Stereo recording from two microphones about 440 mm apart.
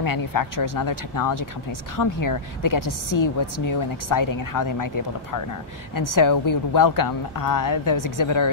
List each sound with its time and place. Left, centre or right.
0.0 s a woman's voice: left